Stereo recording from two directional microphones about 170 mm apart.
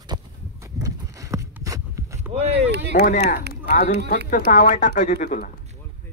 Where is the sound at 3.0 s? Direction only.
60° left (ahead or behind).